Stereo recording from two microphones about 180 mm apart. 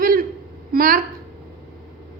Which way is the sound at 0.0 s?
50° right (ahead or behind).